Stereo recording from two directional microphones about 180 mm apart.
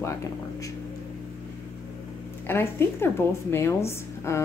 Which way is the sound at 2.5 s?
15° left (ahead or behind).